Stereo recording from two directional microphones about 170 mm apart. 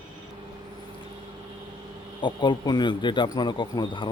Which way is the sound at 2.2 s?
30° left (ahead or behind).